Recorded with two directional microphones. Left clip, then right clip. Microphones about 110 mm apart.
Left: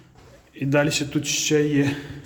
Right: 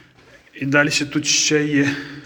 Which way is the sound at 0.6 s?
50° left (ahead or behind).